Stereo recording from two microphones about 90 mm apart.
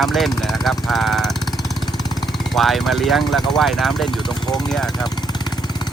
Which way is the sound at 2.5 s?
Centre (ahead or behind).